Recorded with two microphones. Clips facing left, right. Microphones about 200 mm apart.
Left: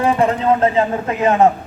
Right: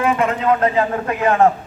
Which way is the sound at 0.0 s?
35° left (ahead or behind).